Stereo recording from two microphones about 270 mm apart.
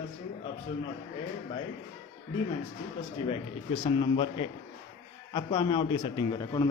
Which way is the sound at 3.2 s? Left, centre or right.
Centre.